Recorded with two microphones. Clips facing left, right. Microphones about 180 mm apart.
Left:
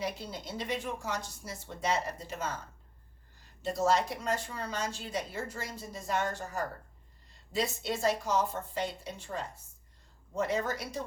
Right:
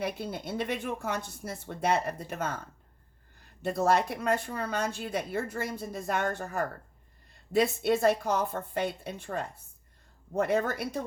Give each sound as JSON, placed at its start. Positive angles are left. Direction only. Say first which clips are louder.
{"t": 0.0, "sound": "speech", "louder": "right 4 dB", "side_deg": -55}
{"t": 3.6, "sound": "speech", "louder": "right 2 dB", "side_deg": -55}